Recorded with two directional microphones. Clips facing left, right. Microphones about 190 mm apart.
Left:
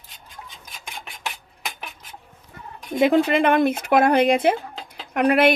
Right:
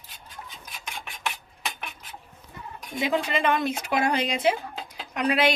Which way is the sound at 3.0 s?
55° left (ahead or behind).